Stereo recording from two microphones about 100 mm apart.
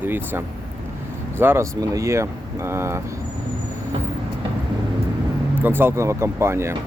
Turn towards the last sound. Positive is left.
turn(degrees=-25)  # may be behind; listen again after turning